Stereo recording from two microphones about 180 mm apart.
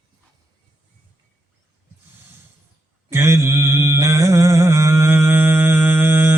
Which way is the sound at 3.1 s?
15° right (ahead or behind).